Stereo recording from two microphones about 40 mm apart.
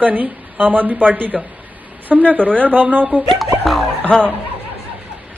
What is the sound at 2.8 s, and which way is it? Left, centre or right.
Speech, right.